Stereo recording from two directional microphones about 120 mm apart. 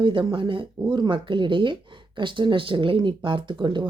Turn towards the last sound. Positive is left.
turn(degrees=-40)  # may be behind; listen again after turning